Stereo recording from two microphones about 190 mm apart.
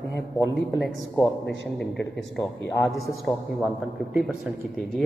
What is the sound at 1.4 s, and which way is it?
Speech, 65° left (ahead or behind).